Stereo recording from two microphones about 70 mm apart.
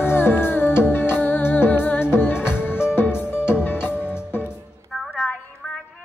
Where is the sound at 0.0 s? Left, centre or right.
Left.